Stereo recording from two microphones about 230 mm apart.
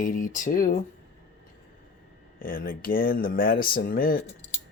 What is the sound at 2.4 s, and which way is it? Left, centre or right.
Speech, left.